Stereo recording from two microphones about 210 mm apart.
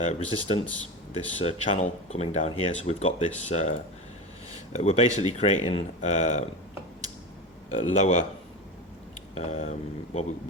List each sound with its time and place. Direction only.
0.0 s speech: 30° left (ahead or behind)
7.7 s speech: 30° left (ahead or behind)
9.3 s speech: 30° left (ahead or behind)